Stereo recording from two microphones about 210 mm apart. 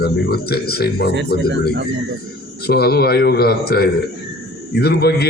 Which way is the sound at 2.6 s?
50° left (ahead or behind).